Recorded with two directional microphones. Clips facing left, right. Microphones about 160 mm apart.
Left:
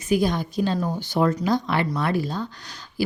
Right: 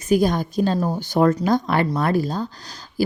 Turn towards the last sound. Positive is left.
turn(degrees=-40)  # may be behind; listen again after turning